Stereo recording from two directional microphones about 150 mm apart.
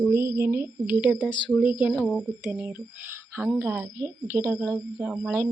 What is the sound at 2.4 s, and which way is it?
A woman's voice, 10° right (ahead or behind).